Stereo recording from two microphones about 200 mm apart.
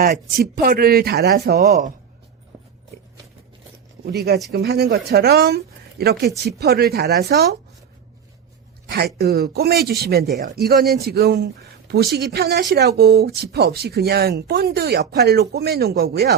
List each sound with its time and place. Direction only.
0.0 s speech: 50° right (ahead or behind)
4.0 s speech: 55° right (ahead or behind)
8.9 s speech: 50° right (ahead or behind)